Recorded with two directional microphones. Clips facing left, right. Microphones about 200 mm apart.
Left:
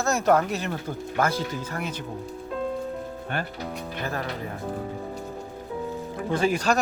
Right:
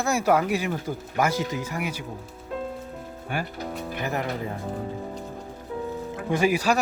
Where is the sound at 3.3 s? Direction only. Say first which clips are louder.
Right 2 dB; 10° right (ahead or behind).